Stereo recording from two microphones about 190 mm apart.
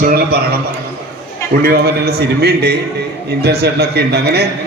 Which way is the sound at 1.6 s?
55° right (ahead or behind).